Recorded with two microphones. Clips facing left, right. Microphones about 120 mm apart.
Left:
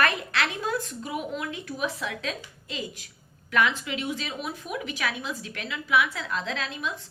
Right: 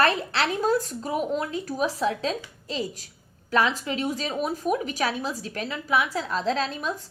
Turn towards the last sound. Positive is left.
turn(degrees=-40)  # may be behind; listen again after turning